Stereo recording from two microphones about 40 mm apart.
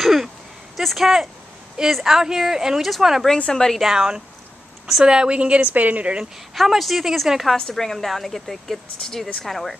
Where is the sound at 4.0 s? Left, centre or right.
Right.